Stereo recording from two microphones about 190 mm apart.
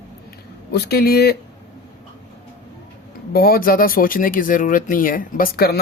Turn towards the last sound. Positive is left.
turn(degrees=50)  # may be behind; listen again after turning